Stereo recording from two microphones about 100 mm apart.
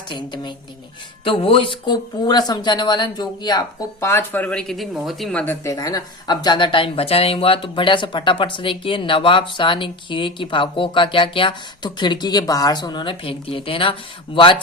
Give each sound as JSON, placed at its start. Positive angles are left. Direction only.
{"t": 0.1, "sound": "speech", "side_deg": 50}
{"t": 1.2, "sound": "speech", "side_deg": 65}
{"t": 4.0, "sound": "speech", "side_deg": 25}
{"t": 4.4, "sound": "speech", "side_deg": 5}
{"t": 5.3, "sound": "speech", "side_deg": 10}
{"t": 5.6, "sound": "speech", "side_deg": 35}
{"t": 13.2, "sound": "speech", "side_deg": 65}